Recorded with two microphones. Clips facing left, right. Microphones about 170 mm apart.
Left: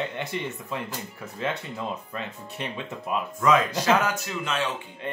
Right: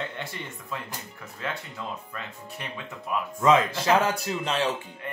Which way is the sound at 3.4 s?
25° right (ahead or behind).